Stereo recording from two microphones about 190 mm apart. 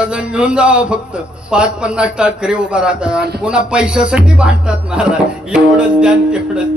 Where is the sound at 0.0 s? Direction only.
5° right (ahead or behind).